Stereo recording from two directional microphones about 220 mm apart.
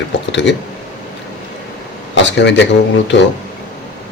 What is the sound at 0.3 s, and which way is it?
Speech, 55° left (ahead or behind).